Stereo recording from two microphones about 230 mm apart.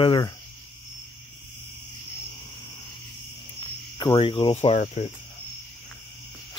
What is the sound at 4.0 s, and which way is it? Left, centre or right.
Cricket, left.